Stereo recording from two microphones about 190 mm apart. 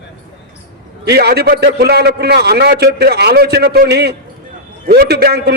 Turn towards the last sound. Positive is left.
turn(degrees=-60)  # may be behind; listen again after turning